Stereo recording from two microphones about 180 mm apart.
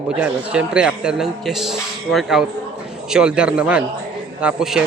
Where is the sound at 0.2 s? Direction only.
5° right (ahead or behind).